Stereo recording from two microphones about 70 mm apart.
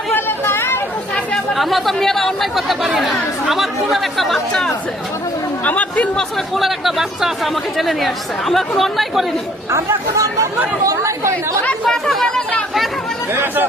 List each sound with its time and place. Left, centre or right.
0.1 s chatter: left
1.5 s speech: centre
5.6 s chatter: left
6.1 s speech: centre
9.7 s speech: right
11.9 s speech: centre
13.3 s speech: right